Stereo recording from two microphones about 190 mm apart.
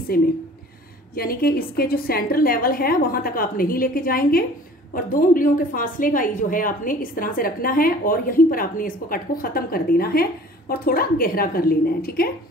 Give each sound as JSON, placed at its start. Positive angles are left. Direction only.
{"t": 0.1, "sound": "a woman's voice", "side_deg": 50}